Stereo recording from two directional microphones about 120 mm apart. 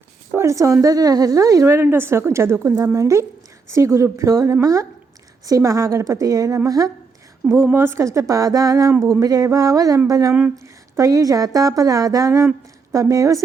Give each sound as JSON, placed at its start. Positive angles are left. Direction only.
{"t": 0.3, "sound": "speech", "side_deg": -25}